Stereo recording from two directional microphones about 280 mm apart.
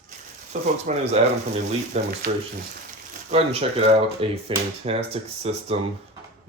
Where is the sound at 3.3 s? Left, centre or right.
Right.